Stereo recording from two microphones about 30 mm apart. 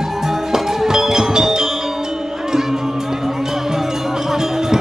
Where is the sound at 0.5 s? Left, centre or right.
Centre.